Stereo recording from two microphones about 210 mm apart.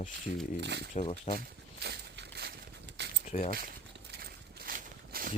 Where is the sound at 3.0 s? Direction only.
55° right (ahead or behind).